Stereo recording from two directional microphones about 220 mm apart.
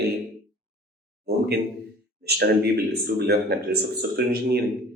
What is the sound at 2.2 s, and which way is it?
A man's voice, 45° right (ahead or behind).